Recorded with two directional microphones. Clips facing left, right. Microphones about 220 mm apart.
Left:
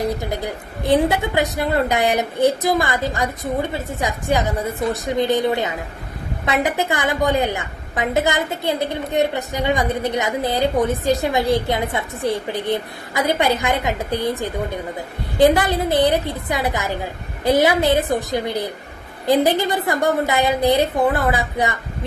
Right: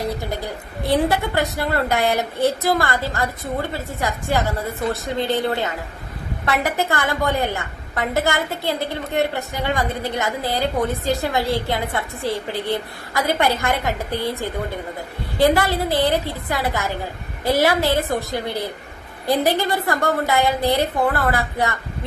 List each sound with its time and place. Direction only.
0.0 s a woman's voice: 15° left (ahead or behind)